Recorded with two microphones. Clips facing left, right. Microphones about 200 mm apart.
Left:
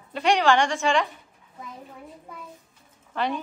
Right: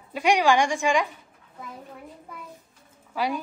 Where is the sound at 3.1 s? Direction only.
10° right (ahead or behind).